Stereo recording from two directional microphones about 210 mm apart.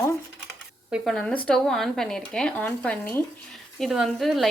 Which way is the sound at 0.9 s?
Centre (ahead or behind).